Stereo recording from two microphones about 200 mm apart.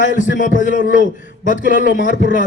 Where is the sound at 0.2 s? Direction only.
40° left (ahead or behind).